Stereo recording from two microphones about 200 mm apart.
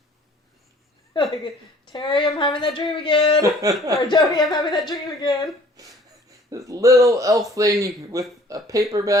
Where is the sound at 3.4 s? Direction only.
15° right (ahead or behind).